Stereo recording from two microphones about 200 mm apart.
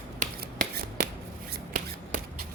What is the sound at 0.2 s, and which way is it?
Shuffling cards, 45° right (ahead or behind).